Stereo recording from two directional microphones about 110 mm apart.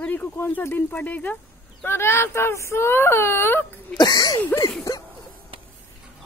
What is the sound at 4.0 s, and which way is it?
Speech, 35° left (ahead or behind).